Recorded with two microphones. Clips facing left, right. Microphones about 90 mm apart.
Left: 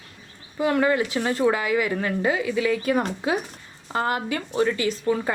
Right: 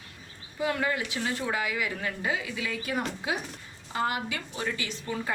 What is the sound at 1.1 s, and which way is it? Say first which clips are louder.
A woman's voice: left 8 dB; 55° left (ahead or behind).